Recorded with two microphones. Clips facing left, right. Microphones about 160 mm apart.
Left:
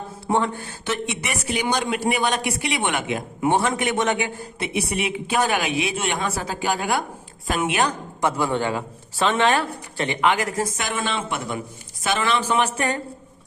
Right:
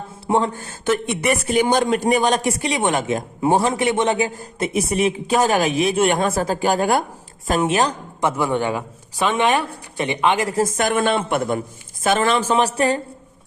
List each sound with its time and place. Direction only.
0.3 s a man's voice: 30° right (ahead or behind)
0.6 s a man's voice: 45° right (ahead or behind); by 4.3 s 30° right (ahead or behind)
4.6 s speech: 45° right (ahead or behind); by 10.5 s 25° right (ahead or behind)
10.5 s a man's voice: 45° right (ahead or behind)